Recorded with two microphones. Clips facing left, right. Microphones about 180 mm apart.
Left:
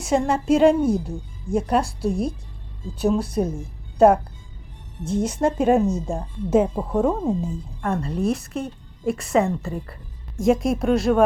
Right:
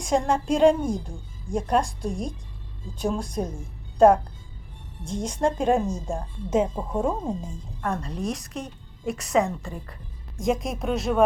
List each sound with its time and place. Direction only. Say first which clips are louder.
0.0 s a woman's voice: left 2 dB; 5° left (ahead or behind)